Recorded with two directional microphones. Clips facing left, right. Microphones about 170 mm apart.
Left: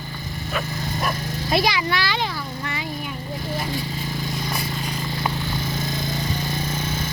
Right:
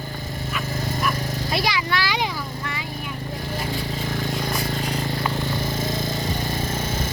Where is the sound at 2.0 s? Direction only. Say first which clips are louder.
Even; 10° right (ahead or behind).